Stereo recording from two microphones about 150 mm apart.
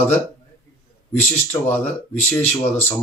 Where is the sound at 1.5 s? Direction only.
15° left (ahead or behind).